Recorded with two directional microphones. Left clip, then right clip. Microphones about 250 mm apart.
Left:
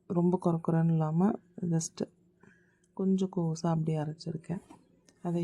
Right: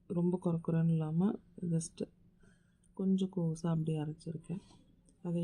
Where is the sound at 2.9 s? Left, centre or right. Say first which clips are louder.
Left 5 dB; centre.